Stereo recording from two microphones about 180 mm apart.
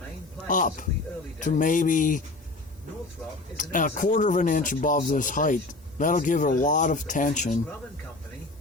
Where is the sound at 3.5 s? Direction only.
45° left (ahead or behind).